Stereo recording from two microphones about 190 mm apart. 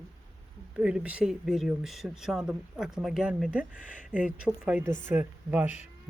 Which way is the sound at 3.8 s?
45° left (ahead or behind).